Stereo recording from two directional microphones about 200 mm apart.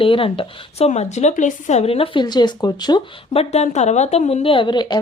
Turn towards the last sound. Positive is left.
turn(degrees=20)  # may be behind; listen again after turning